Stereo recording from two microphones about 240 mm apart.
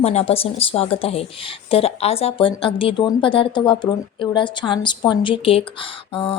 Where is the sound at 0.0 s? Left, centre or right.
Left.